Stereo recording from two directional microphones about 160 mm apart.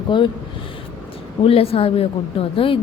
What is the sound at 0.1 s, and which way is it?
Speech, 30° left (ahead or behind).